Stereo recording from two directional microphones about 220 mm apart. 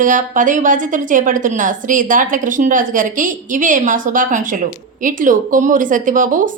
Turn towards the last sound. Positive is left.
turn(degrees=-35)  # may be behind; listen again after turning